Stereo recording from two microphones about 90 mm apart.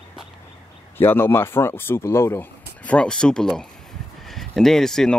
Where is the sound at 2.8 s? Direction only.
15° left (ahead or behind).